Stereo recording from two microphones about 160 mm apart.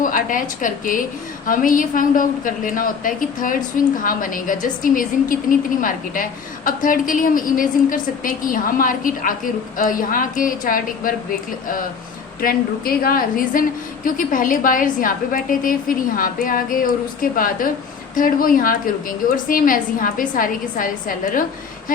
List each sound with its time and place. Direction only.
0.0 s a woman's voice: 55° left (ahead or behind)